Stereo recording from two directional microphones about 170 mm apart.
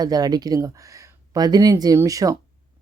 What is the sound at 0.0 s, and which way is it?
Speech, 25° right (ahead or behind).